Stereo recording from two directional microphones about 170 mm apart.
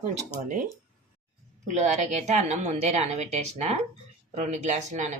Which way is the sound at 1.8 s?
45° right (ahead or behind).